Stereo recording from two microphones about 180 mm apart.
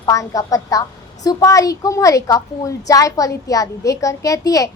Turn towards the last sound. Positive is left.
turn(degrees=20)  # may be behind; listen again after turning